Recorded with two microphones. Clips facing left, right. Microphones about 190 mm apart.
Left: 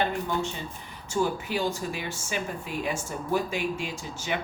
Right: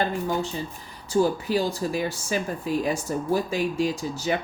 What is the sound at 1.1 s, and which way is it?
Speech, 35° right (ahead or behind).